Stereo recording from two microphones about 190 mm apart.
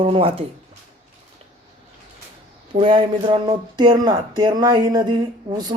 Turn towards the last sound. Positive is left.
turn(degrees=-20)  # may be behind; listen again after turning